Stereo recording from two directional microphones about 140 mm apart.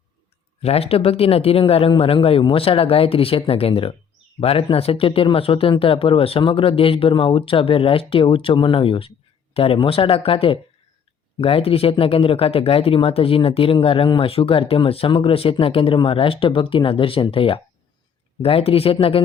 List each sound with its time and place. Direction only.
0.6 s speech: 45° left (ahead or behind)